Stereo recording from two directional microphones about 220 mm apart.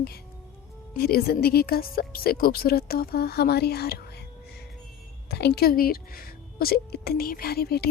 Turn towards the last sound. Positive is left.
turn(degrees=45)  # may be behind; listen again after turning